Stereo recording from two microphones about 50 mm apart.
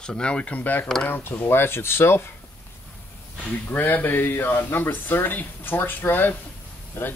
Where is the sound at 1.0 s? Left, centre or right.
Left.